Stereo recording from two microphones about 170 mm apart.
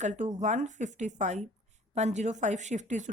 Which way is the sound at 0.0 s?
45° right (ahead or behind).